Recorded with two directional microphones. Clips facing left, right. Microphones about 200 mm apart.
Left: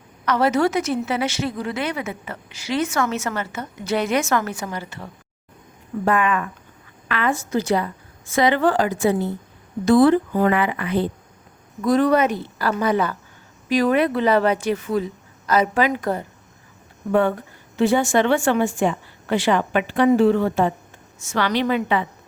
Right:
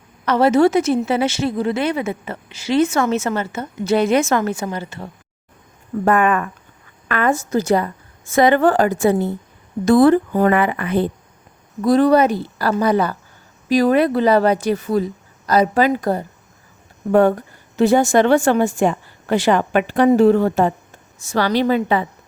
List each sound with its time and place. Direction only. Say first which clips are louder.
0.3 s a woman's voice: right 5 dB; 25° right (ahead or behind)
6.1 s a woman's voice: right 4 dB; 50° right (ahead or behind)
11.8 s a woman's voice: right 4 dB; 35° right (ahead or behind)